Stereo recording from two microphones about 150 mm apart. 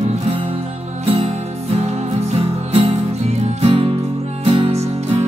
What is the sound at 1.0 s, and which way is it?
Music, 40° right (ahead or behind).